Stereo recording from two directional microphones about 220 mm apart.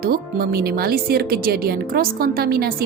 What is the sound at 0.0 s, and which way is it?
A woman's voice, 40° right (ahead or behind).